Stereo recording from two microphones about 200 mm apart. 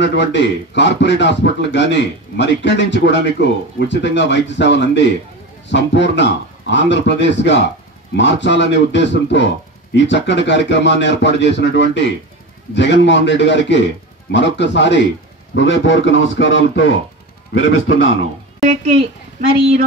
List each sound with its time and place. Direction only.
0.0 s a man's voice: 60° left (ahead or behind)